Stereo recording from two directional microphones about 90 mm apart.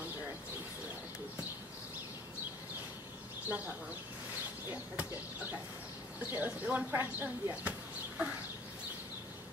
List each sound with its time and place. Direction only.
3.4 s speech: 20° right (ahead or behind)